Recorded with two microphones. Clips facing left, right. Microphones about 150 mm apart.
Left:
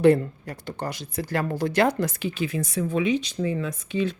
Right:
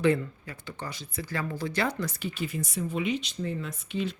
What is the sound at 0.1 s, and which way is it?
Speech, 40° left (ahead or behind).